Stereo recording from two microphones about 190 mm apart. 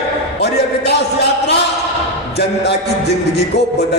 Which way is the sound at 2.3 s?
65° left (ahead or behind).